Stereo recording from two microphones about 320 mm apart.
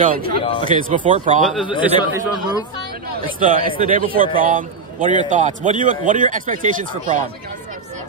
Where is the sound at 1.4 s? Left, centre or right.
Centre.